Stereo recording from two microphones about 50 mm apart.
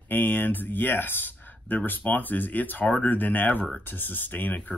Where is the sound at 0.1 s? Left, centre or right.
Left.